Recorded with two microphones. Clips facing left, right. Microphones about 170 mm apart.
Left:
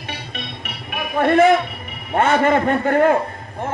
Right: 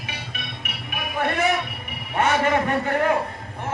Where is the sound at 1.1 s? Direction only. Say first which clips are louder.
Left 9 dB; 55° left (ahead or behind).